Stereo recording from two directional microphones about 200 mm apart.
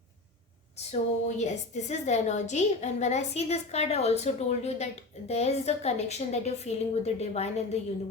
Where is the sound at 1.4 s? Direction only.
35° left (ahead or behind).